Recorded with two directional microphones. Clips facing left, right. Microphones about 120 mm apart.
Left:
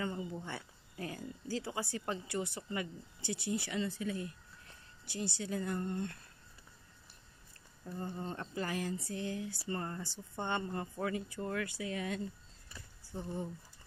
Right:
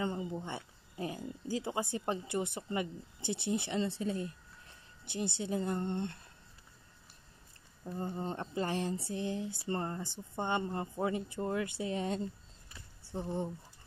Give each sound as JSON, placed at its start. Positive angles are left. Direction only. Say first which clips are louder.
{"t": 0.0, "sound": "speech", "louder": "right 3 dB", "side_deg": -25}
{"t": 7.8, "sound": "speech", "louder": "right 3 dB", "side_deg": -20}